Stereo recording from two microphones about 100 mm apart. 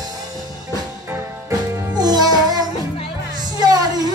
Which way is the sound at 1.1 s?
25° right (ahead or behind).